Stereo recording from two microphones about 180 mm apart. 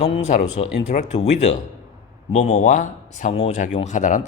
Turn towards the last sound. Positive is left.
turn(degrees=45)  # may be behind; listen again after turning